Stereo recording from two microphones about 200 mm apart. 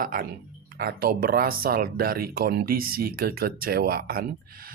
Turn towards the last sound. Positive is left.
turn(degrees=-50)  # may be behind; listen again after turning